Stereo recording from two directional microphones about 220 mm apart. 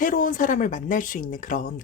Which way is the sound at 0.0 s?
35° left (ahead or behind).